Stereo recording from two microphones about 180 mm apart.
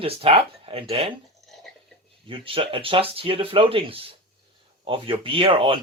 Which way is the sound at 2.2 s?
30° right (ahead or behind).